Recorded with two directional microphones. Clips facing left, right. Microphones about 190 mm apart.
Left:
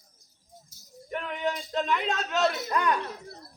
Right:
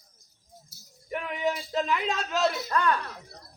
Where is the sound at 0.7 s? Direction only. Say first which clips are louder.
Right 1 dB; 10° right (ahead or behind).